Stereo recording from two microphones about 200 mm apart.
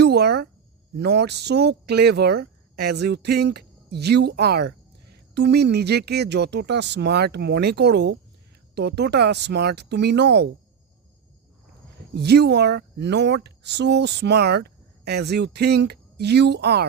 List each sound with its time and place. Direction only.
0.0 s a sound: 55° right (ahead or behind)
0.9 s speech: 55° right (ahead or behind)
12.1 s speech: 55° right (ahead or behind)